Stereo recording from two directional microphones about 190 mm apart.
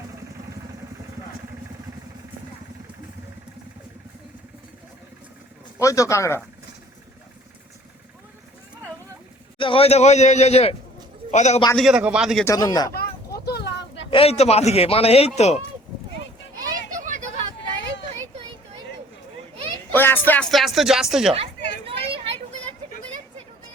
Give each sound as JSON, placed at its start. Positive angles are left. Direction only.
{"t": 5.8, "sound": "speech", "side_deg": 15}
{"t": 9.6, "sound": "a man's voice", "side_deg": 30}
{"t": 11.7, "sound": "a man's voice", "side_deg": 0}
{"t": 12.5, "sound": "speech", "side_deg": 20}
{"t": 12.9, "sound": "a sound", "side_deg": 55}
{"t": 14.1, "sound": "a man's voice", "side_deg": 30}
{"t": 17.0, "sound": "vehicle", "side_deg": -40}
{"t": 18.1, "sound": "children playing", "side_deg": -30}
{"t": 19.9, "sound": "a sound", "side_deg": 10}
{"t": 21.8, "sound": "a sound", "side_deg": -30}